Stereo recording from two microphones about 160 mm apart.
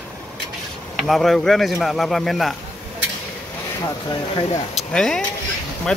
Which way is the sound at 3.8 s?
25° left (ahead or behind).